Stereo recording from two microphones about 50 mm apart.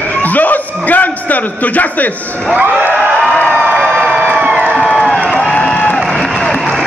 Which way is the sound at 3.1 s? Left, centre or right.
Centre.